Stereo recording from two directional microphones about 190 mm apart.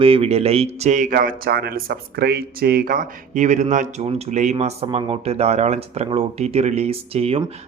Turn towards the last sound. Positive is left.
turn(degrees=-30)  # may be behind; listen again after turning